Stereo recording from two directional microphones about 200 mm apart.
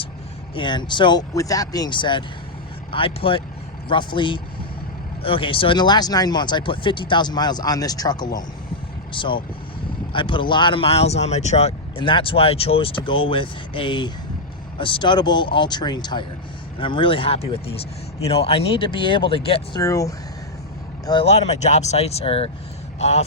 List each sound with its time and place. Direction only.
0.5 s speech: 25° left (ahead or behind)
19.8 s speech: 15° left (ahead or behind)
21.1 s a man's voice: 30° left (ahead or behind)